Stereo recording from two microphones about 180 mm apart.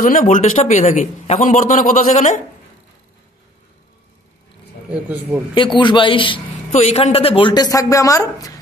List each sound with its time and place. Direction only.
0.0 s a man's voice: 45° left (ahead or behind)
5.1 s a man's voice: 10° right (ahead or behind)
5.8 s speech: 25° left (ahead or behind)
6.7 s speech: 40° left (ahead or behind); by 8.5 s 20° left (ahead or behind)